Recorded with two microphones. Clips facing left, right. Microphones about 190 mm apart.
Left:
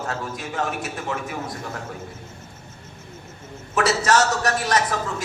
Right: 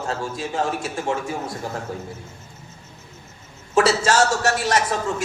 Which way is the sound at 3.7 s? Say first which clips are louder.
Right 2 dB; 30° right (ahead or behind).